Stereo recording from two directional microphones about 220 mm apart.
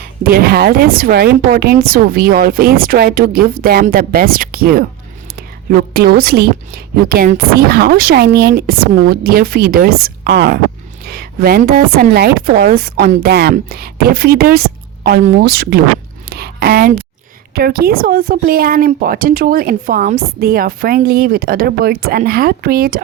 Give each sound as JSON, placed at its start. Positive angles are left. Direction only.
{"t": 0.0, "sound": "a woman's voice", "side_deg": -45}
{"t": 16.3, "sound": "a sound", "side_deg": -45}
{"t": 17.5, "sound": "speech", "side_deg": -45}